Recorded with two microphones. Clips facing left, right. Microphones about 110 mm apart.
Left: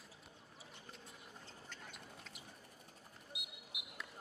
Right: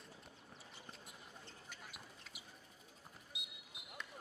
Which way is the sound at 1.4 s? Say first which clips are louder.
Left 1 dB; 5° right (ahead or behind).